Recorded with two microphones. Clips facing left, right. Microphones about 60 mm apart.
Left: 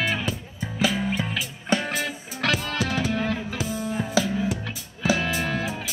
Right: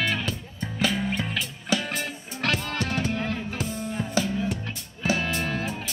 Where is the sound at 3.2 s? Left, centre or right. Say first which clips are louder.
Left 2 dB; centre.